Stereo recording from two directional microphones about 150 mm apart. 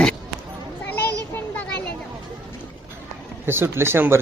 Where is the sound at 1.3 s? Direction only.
10° left (ahead or behind).